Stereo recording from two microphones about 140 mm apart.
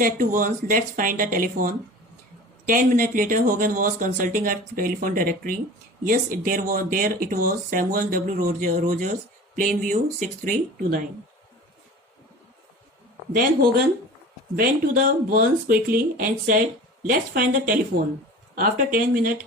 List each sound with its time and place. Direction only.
0.0 s speech: 80° right
13.3 s speech: 75° right (ahead or behind)
14.5 s speech: 90° right